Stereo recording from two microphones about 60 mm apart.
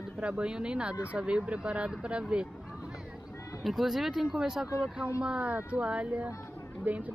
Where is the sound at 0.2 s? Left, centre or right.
Centre.